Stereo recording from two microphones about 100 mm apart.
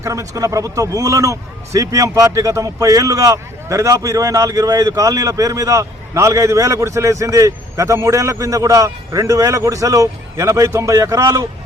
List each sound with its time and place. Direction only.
0.0 s a man's voice: 35° right (ahead or behind)